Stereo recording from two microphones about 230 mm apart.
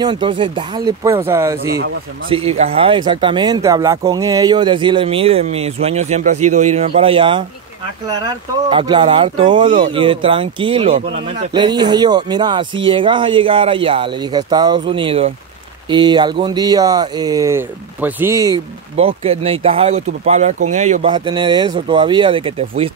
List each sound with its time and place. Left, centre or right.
0.0 s speech: centre
2.2 s speech: right
8.6 s speech: right
18.9 s speech: right